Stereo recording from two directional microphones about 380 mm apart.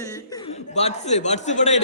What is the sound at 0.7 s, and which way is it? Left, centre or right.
A man's voice, centre.